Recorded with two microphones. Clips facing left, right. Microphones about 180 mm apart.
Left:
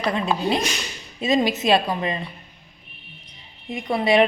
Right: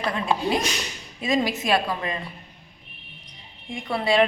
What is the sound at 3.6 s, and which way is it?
Speech, 20° left (ahead or behind).